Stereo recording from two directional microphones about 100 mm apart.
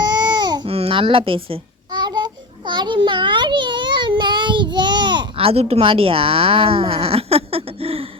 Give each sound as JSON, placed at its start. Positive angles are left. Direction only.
{"t": 0.0, "sound": "baby cry", "side_deg": -45}
{"t": 0.7, "sound": "speech", "side_deg": -70}
{"t": 1.9, "sound": "babbling", "side_deg": -45}